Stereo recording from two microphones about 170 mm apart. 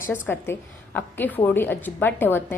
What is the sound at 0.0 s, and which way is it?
A woman's voice, 10° left (ahead or behind).